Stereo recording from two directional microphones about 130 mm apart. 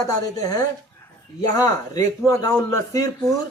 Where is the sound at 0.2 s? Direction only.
30° left (ahead or behind).